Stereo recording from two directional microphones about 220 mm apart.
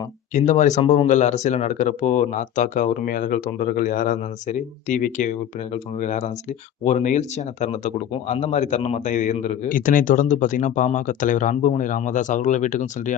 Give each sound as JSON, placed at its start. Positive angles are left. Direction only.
{"t": 0.3, "sound": "speech", "side_deg": 35}